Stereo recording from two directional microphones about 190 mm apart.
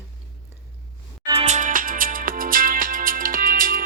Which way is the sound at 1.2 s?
30° right (ahead or behind).